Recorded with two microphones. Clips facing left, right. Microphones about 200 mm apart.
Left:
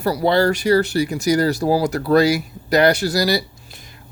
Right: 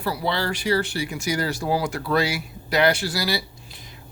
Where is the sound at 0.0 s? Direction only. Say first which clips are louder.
Left 9 dB; 45° left (ahead or behind).